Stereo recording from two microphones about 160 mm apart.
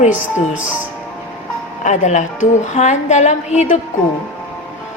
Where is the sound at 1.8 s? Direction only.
50° left (ahead or behind).